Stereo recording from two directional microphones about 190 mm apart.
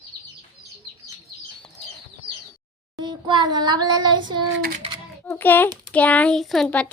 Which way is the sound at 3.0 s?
25° right (ahead or behind).